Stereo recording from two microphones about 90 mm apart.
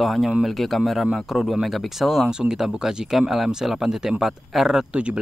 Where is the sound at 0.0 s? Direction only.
Centre (ahead or behind).